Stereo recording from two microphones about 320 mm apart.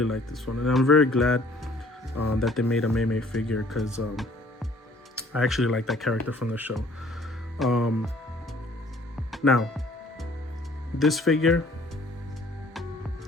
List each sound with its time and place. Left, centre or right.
0.0 s speech: centre
9.3 s music: centre
10.9 s speech: centre